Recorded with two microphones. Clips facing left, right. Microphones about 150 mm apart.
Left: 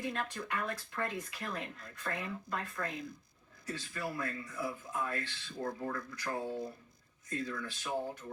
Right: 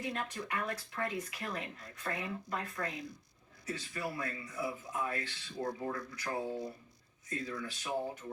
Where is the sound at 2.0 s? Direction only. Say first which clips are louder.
Right 1 dB; 10° right (ahead or behind).